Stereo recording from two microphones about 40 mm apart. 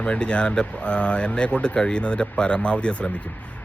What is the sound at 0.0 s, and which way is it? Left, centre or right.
Speech, left.